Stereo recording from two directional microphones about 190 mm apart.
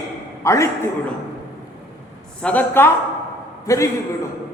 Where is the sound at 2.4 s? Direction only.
5° left (ahead or behind).